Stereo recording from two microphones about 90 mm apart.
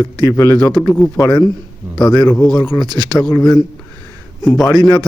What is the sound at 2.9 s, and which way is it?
Speech, 50° right (ahead or behind).